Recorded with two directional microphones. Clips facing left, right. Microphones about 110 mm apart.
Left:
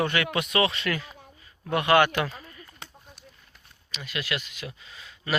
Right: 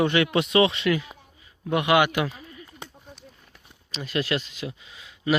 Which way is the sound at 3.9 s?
35° right (ahead or behind).